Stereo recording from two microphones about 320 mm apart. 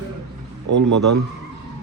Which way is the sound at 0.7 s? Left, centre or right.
Right.